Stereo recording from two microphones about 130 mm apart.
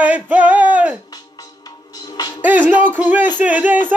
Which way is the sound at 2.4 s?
10° right (ahead or behind).